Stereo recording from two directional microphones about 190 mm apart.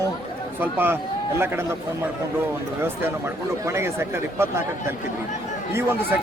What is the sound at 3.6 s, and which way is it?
Speech, 15° right (ahead or behind).